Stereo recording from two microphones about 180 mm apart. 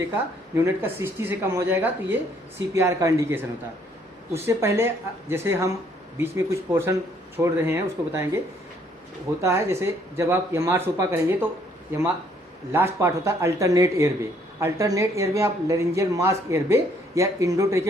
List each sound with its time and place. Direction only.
0.5 s speech: 15° right (ahead or behind)
9.4 s speech: 15° right (ahead or behind)
12.7 s speech: 15° right (ahead or behind)